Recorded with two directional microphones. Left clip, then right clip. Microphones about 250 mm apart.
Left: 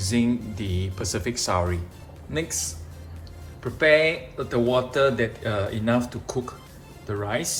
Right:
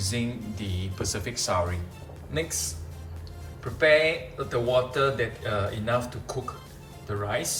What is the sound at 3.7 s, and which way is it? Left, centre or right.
Speech, left.